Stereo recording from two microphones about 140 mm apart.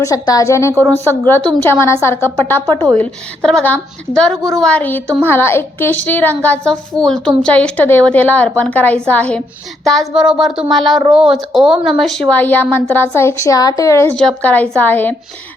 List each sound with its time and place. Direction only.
0.0 s a woman's voice: 25° left (ahead or behind)
14.2 s a woman's voice: 5° left (ahead or behind)